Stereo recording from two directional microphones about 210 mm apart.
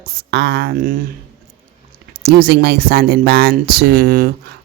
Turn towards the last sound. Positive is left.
turn(degrees=-45)  # may be behind; listen again after turning